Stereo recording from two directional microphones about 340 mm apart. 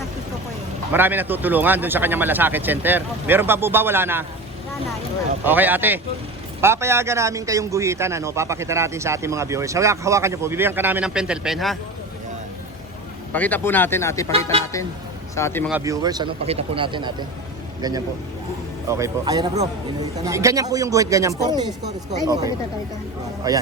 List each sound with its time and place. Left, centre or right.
0.9 s speech: centre
5.5 s a man's voice: centre
13.3 s speech: centre
15.4 s speech: centre
15.7 s a man's voice: centre